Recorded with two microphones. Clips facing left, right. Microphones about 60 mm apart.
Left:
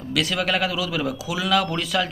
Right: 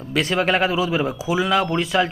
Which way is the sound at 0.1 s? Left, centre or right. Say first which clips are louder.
Right 4 dB; right.